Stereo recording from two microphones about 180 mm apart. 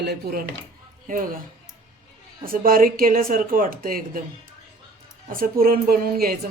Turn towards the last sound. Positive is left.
turn(degrees=-55)  # may be behind; listen again after turning